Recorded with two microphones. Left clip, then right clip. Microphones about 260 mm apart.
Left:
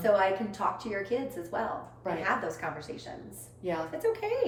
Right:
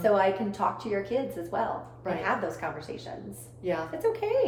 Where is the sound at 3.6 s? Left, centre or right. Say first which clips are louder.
Right 3 dB; centre.